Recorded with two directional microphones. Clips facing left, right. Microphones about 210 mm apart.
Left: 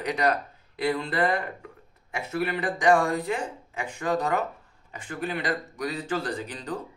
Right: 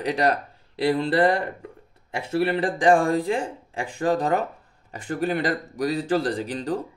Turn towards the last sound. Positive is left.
turn(degrees=-35)  # may be behind; listen again after turning